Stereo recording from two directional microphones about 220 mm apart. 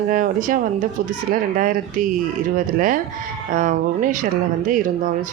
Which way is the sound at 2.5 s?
40° right (ahead or behind).